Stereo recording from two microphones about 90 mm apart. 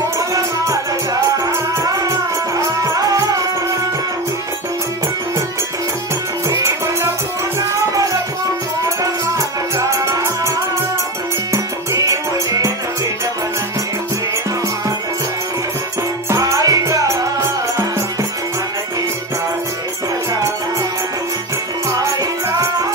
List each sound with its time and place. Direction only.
1.4 s music: 40° right (ahead or behind)
7.9 s music: 40° right (ahead or behind)
9.8 s music: 35° right (ahead or behind)
16.3 s music: 35° right (ahead or behind)